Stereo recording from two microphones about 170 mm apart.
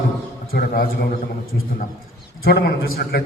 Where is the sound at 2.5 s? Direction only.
70° left (ahead or behind).